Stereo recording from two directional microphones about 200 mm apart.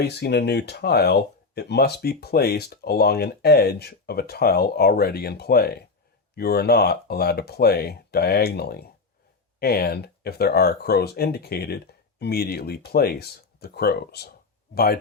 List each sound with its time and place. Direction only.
0.0 s speech: 55° left (ahead or behind)